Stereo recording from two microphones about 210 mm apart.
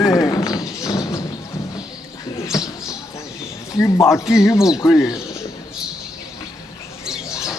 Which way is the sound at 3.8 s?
15° left (ahead or behind).